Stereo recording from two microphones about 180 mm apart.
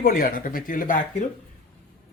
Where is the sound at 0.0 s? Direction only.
50° left (ahead or behind).